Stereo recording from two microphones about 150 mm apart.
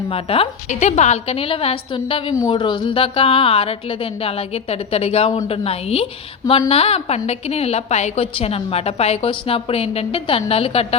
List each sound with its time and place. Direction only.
0.1 s a woman's voice: 40° left (ahead or behind)
0.7 s a woman's voice: 50° left (ahead or behind)